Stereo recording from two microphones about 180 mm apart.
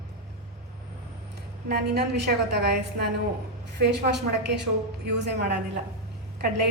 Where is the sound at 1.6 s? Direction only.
65° right (ahead or behind).